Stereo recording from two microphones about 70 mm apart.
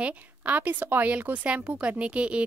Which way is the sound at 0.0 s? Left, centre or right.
Right.